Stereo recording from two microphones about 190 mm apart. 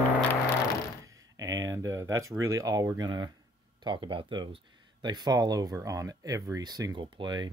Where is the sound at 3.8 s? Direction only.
25° right (ahead or behind).